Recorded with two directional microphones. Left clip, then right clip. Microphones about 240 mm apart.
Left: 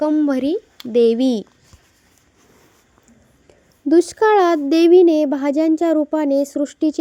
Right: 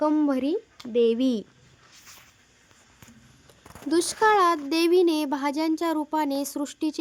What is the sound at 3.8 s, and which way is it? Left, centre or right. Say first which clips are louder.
A child's voice: left 7 dB; centre.